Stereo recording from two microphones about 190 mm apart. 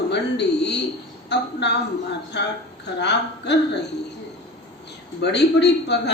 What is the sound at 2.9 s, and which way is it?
Speech, 65° left (ahead or behind).